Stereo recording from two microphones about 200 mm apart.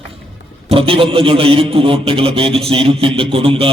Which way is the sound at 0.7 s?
30° right (ahead or behind).